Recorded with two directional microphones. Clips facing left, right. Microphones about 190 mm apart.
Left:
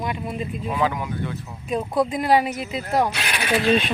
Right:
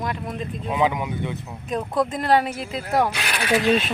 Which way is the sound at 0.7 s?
20° right (ahead or behind).